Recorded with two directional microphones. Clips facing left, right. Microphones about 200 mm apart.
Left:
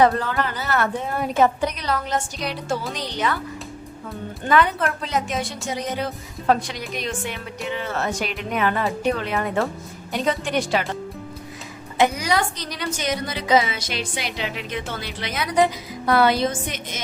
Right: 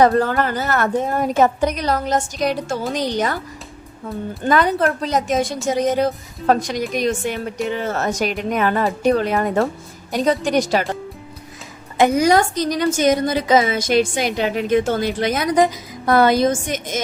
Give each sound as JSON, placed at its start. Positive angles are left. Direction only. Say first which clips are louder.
{"t": 0.0, "sound": "a woman's voice", "louder": "right 4 dB", "side_deg": -45}
{"t": 4.4, "sound": "a woman's voice", "louder": "right 3 dB", "side_deg": -40}
{"t": 11.9, "sound": "a woman's voice", "louder": "right 6 dB", "side_deg": -45}